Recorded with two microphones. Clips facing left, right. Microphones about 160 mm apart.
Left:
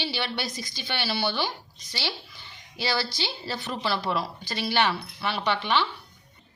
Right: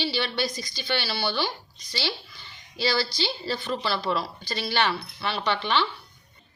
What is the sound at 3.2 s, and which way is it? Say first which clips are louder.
A woman's voice: right 3 dB; 15° left (ahead or behind).